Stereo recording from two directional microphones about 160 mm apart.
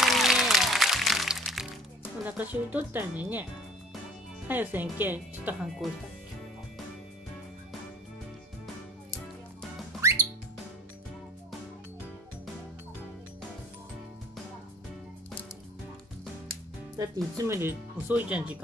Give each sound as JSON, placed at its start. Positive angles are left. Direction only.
{"t": 0.0, "sound": "music", "side_deg": 0}
{"t": 2.2, "sound": "speech", "side_deg": -10}
{"t": 4.5, "sound": "speech", "side_deg": -10}
{"t": 5.8, "sound": "speech", "side_deg": 0}
{"t": 10.0, "sound": "music", "side_deg": -20}
{"t": 16.9, "sound": "speech", "side_deg": -20}